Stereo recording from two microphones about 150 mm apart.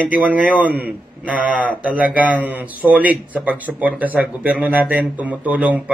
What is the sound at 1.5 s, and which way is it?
A man's voice, 10° right (ahead or behind).